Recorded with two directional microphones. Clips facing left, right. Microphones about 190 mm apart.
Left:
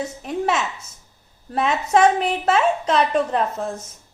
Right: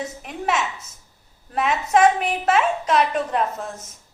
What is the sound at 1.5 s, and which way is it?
A woman's voice, 30° left (ahead or behind).